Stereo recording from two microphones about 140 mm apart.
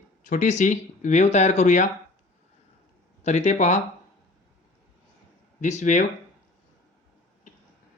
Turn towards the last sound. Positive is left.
turn(degrees=60)  # may be behind; listen again after turning